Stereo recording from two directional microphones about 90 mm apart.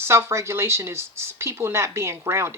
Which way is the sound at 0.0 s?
30° right (ahead or behind).